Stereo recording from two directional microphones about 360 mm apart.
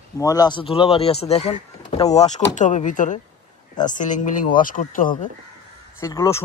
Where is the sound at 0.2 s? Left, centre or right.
Centre.